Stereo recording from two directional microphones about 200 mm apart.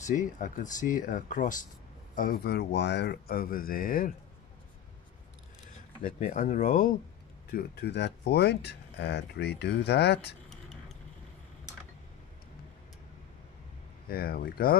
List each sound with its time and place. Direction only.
0.0 s speech: 40° left (ahead or behind)
6.0 s speech: 40° left (ahead or behind)
7.5 s speech: 55° left (ahead or behind)
10.5 s vehicle: 5° left (ahead or behind)
14.0 s speech: 50° left (ahead or behind)